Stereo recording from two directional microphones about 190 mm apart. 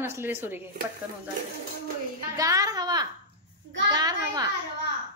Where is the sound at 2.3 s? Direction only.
15° right (ahead or behind).